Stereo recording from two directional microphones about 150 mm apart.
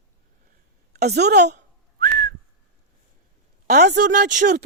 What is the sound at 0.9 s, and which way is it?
Whistling, 90° right.